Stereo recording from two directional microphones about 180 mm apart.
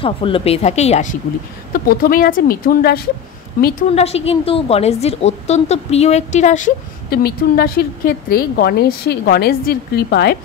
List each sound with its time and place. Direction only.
0.0 s a woman's voice: 30° left (ahead or behind)
1.7 s speech: 50° left (ahead or behind)
3.9 s a woman's voice: 35° left (ahead or behind); by 10.3 s 65° left (ahead or behind)